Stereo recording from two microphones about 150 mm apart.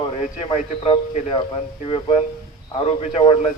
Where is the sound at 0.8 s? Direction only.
35° left (ahead or behind).